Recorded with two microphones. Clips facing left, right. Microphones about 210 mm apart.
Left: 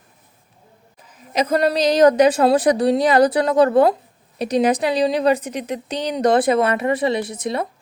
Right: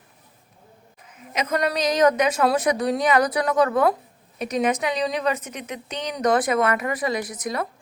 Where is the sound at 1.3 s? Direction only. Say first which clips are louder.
Left 6 dB; 35° left (ahead or behind).